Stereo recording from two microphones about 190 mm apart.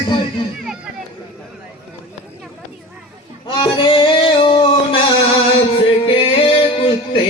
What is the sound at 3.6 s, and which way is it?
Music, 25° left (ahead or behind).